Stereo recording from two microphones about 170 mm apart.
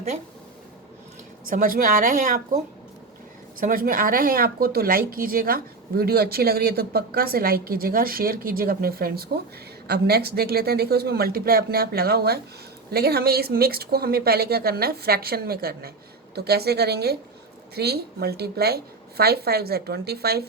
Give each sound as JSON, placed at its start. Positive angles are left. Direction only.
{"t": 1.5, "sound": "speech", "side_deg": -55}
{"t": 3.6, "sound": "a woman's voice", "side_deg": -55}